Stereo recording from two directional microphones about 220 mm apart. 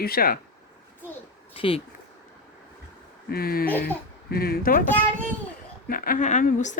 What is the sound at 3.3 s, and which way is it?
Speech, 45° left (ahead or behind).